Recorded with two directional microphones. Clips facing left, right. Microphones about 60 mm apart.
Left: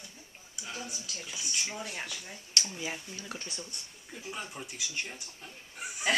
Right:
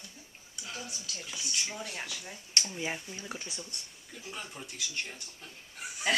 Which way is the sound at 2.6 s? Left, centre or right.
Right.